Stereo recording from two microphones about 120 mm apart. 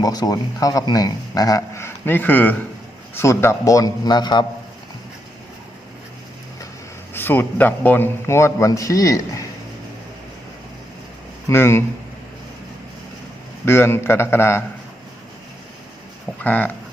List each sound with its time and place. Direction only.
0.0 s speech: 30° left (ahead or behind)
7.1 s speech: 15° left (ahead or behind)
11.4 s speech: 20° left (ahead or behind)
13.7 s speech: 20° left (ahead or behind)
16.4 s speech: 15° left (ahead or behind)